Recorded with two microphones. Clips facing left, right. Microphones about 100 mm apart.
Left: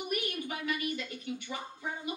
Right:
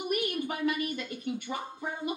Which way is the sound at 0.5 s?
45° right (ahead or behind).